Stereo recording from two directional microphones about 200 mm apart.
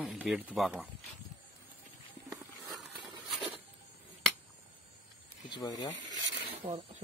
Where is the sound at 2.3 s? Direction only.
Centre (ahead or behind).